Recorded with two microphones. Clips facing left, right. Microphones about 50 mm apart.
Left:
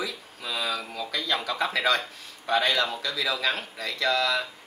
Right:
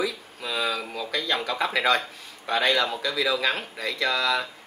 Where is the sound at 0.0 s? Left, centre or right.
Centre.